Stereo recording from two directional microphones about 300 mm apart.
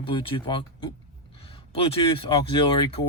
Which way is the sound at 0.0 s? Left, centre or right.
Centre.